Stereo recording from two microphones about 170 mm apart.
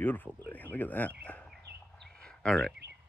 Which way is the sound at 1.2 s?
5° left (ahead or behind).